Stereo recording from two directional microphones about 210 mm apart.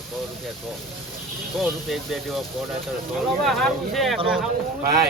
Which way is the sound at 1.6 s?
Centre (ahead or behind).